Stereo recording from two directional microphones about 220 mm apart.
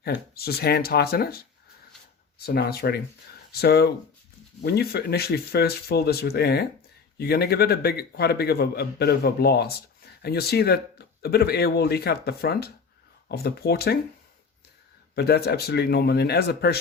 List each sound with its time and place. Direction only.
0.0 s a man's voice: 45° left (ahead or behind)
2.5 s a man's voice: 45° left (ahead or behind)
15.1 s a man's voice: 45° left (ahead or behind)